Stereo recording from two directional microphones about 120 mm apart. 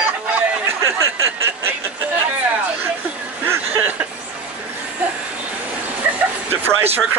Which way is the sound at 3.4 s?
20° right (ahead or behind).